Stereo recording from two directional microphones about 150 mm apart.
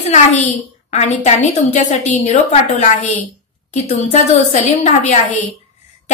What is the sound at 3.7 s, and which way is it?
A woman's voice, 50° left (ahead or behind).